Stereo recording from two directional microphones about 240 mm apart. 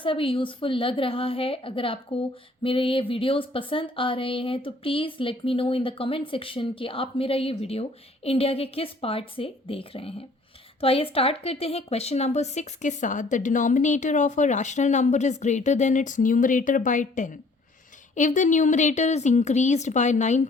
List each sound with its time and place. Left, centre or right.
0.0 s a woman's voice: left